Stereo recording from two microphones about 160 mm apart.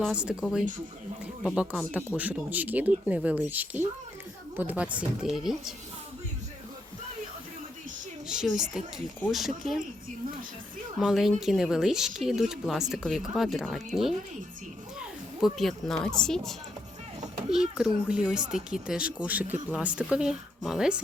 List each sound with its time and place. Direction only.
0.0 s speech: 5° right (ahead or behind)
1.5 s speech: 5° right (ahead or behind)
8.3 s speech: 5° right (ahead or behind)
11.0 s speech: centre (ahead or behind)